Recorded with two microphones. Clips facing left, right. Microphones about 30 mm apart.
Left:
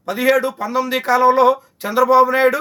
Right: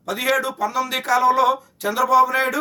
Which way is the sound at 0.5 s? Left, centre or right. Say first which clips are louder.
Left 3 dB; left.